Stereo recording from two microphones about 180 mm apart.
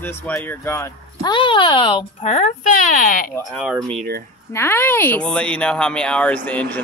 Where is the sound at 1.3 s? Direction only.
25° left (ahead or behind); by 3.3 s 50° left (ahead or behind).